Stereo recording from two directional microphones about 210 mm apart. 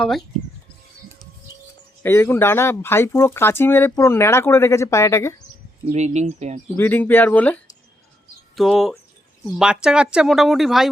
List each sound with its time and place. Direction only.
0.0 s speech: centre (ahead or behind)
2.0 s speech: 10° left (ahead or behind)
5.9 s speech: 30° right (ahead or behind)
6.7 s speech: 10° left (ahead or behind)